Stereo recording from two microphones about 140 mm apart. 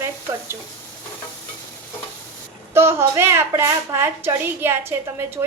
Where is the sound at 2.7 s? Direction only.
20° right (ahead or behind).